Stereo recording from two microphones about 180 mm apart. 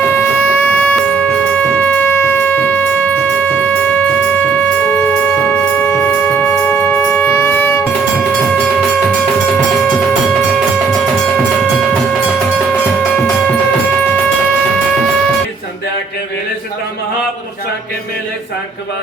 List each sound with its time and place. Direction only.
0.0 s shofar: 10° left (ahead or behind)
0.7 s wind instrument: 10° left (ahead or behind)
1.5 s shofar: 10° left (ahead or behind)
4.4 s music: 10° left (ahead or behind)